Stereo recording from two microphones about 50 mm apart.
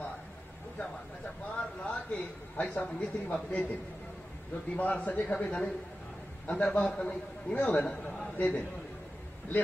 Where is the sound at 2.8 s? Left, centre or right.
Centre.